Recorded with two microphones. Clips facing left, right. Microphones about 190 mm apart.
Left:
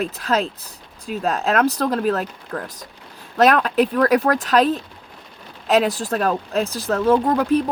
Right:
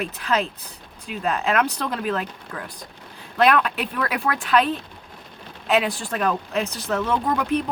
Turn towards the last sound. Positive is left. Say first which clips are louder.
# left 5 dB
turn(degrees=40)  # may be behind; listen again after turning